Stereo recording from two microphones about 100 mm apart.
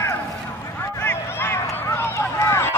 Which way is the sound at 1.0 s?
25° left (ahead or behind).